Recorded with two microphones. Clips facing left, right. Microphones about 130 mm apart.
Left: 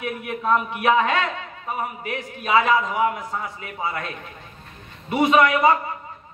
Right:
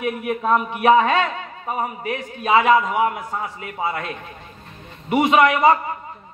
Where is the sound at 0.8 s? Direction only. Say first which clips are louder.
Right 5 dB; 30° right (ahead or behind).